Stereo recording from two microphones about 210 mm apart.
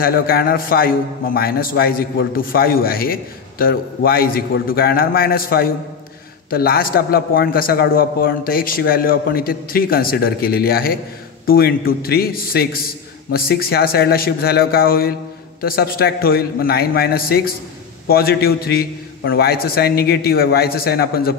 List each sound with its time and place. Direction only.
0.0 s a man's voice: 45° left (ahead or behind)